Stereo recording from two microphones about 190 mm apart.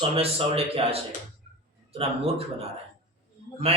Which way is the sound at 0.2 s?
30° right (ahead or behind).